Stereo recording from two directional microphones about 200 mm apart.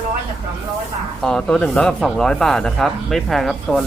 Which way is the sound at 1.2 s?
5° left (ahead or behind).